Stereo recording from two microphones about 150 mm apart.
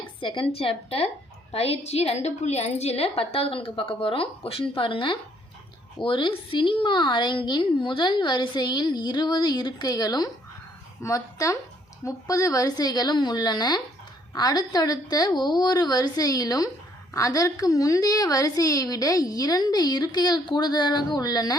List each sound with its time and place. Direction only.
0.2 s a woman's voice: 35° left (ahead or behind)